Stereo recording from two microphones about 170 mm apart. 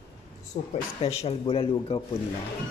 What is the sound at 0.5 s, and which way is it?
A man's voice, 45° left (ahead or behind).